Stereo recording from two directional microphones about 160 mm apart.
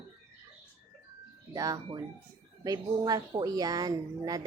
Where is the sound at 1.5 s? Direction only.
20° right (ahead or behind).